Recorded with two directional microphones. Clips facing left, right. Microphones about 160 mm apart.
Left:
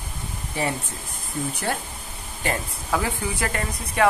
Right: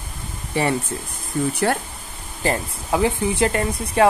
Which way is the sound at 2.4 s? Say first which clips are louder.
Right 5 dB; 30° right (ahead or behind).